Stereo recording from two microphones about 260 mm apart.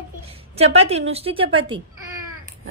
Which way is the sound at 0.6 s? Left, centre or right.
Right.